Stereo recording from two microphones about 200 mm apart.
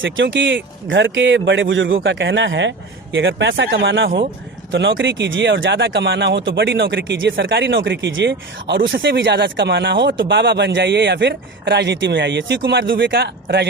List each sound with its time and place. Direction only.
0.0 s speech: 70° right (ahead or behind)